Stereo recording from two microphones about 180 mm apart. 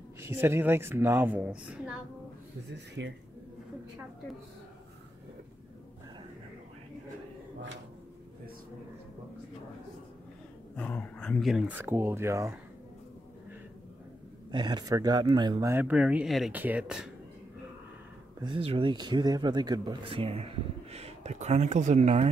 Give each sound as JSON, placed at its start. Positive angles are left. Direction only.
{"t": 0.2, "sound": "speech", "side_deg": -15}
{"t": 2.7, "sound": "speech", "side_deg": -75}
{"t": 10.8, "sound": "speech", "side_deg": 10}
{"t": 14.5, "sound": "speech", "side_deg": -25}
{"t": 15.7, "sound": "speech", "side_deg": -10}
{"t": 18.4, "sound": "speech", "side_deg": -30}